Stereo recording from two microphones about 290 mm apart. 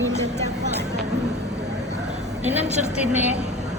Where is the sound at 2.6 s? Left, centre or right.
Right.